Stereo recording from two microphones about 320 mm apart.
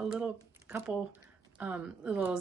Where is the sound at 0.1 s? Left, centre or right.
Centre.